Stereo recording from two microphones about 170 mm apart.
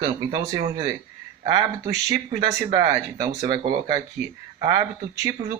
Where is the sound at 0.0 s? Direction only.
25° right (ahead or behind).